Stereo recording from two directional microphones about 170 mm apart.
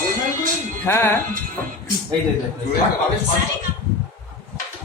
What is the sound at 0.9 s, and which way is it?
Speech, 15° left (ahead or behind).